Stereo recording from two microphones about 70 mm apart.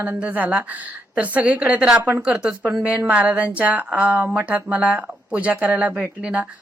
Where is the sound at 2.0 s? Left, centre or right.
Right.